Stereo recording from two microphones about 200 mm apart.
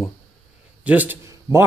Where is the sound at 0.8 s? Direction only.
10° right (ahead or behind).